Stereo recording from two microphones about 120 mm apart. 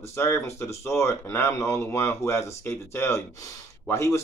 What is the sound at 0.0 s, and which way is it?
Speech, 20° left (ahead or behind).